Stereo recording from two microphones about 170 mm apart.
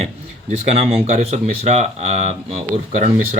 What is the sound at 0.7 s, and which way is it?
Speech, 40° right (ahead or behind).